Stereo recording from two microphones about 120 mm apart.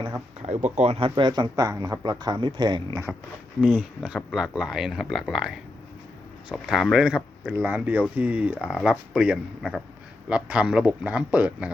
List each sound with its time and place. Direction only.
0.4 s speech: 75° right (ahead or behind); by 1.1 s 55° right (ahead or behind)
1.1 s speech: 40° right (ahead or behind)
3.1 s speech: centre (ahead or behind)